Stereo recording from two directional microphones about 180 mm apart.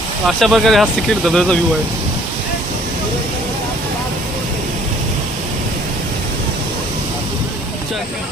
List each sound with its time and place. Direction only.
0.3 s speech: centre (ahead or behind)